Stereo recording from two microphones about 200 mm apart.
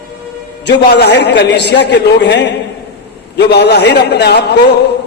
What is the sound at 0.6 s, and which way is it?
A man's voice, 55° left (ahead or behind).